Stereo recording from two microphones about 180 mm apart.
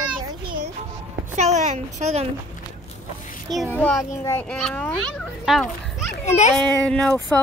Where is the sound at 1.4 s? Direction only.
40° right (ahead or behind).